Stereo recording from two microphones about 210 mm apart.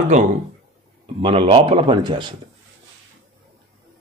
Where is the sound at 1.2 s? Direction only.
25° right (ahead or behind).